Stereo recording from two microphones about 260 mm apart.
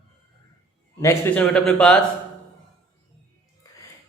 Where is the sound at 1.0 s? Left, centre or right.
Centre.